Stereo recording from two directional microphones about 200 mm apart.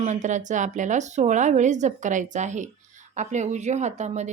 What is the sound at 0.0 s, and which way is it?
Speech, 35° right (ahead or behind).